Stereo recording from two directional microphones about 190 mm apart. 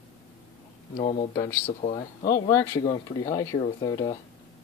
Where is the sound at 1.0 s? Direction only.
35° left (ahead or behind).